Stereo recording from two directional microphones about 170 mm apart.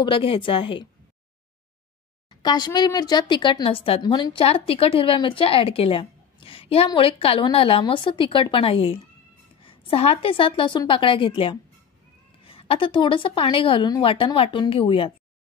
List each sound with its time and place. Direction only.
0.0 s a woman's voice: 30° left (ahead or behind)
2.4 s a woman's voice: 25° left (ahead or behind)